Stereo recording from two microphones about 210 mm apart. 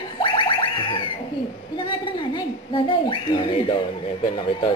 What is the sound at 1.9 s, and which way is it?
A woman's voice, 20° left (ahead or behind).